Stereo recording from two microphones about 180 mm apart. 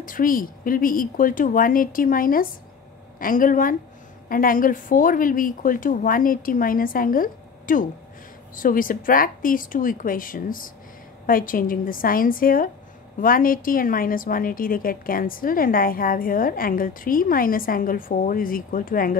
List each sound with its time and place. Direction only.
0.0 s a woman's voice: 50° left (ahead or behind)